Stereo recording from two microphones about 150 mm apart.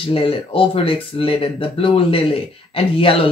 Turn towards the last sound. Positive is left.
turn(degrees=35)  # may be behind; listen again after turning